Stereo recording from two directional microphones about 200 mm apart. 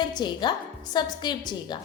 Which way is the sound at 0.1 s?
20° left (ahead or behind).